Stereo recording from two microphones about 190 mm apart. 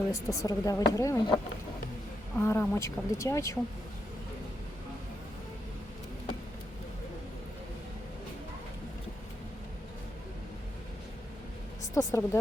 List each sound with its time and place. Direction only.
0.1 s a woman's voice: 15° left (ahead or behind)
2.4 s a woman's voice: 15° left (ahead or behind)
11.9 s a woman's voice: 15° left (ahead or behind)